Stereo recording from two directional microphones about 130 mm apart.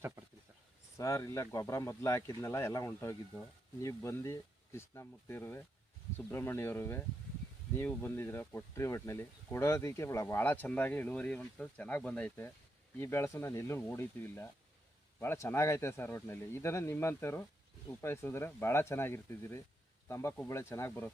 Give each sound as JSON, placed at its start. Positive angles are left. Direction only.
{"t": 0.9, "sound": "speech", "side_deg": 25}